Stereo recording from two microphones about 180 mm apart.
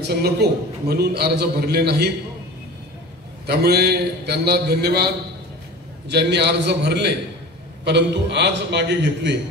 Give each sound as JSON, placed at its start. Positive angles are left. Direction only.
{"t": 0.1, "sound": "a man's voice", "side_deg": -65}
{"t": 3.4, "sound": "a man's voice", "side_deg": -60}